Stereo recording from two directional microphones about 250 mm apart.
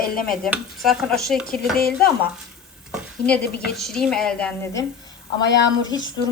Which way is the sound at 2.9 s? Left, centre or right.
Centre.